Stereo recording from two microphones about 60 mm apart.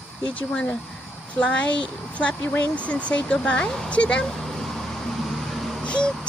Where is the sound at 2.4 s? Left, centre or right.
Left; by 4.4 s centre.